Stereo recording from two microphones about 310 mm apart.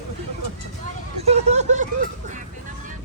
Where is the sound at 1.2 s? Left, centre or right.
Right.